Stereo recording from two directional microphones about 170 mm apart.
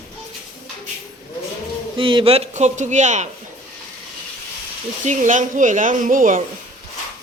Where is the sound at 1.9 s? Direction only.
30° right (ahead or behind).